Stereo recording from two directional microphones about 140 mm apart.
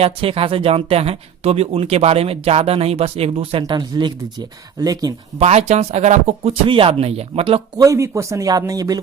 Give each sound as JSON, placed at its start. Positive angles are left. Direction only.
{"t": 0.0, "sound": "speech", "side_deg": -40}
{"t": 3.6, "sound": "speech", "side_deg": -30}
{"t": 5.4, "sound": "speech", "side_deg": -50}
{"t": 7.8, "sound": "speech", "side_deg": -20}